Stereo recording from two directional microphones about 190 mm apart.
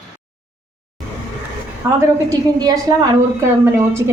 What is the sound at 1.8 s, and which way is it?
A woman's voice, 20° right (ahead or behind).